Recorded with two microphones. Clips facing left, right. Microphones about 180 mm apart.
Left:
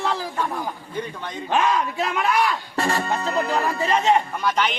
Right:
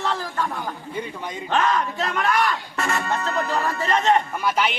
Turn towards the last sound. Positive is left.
turn(degrees=-10)  # may be behind; listen again after turning